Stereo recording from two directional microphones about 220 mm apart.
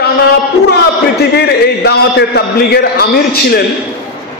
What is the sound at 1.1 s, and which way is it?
A man's voice, 45° left (ahead or behind).